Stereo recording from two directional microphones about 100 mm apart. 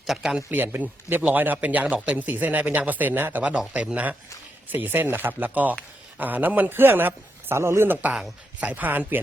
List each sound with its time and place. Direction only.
0.1 s a man's voice: 10° right (ahead or behind)